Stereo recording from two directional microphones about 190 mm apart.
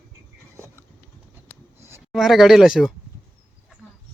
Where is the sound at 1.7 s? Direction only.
15° right (ahead or behind).